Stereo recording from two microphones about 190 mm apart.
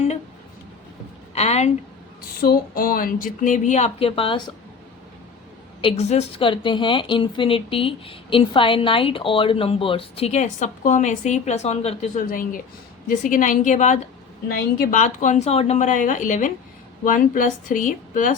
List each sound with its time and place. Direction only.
1.4 s a woman's voice: 35° left (ahead or behind)
2.4 s speech: 50° left (ahead or behind); by 4.5 s 30° left (ahead or behind)
5.8 s a woman's voice: 35° left (ahead or behind)